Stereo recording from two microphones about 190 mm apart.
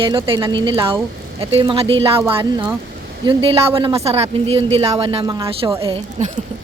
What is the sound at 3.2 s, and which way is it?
A woman's voice, 30° right (ahead or behind).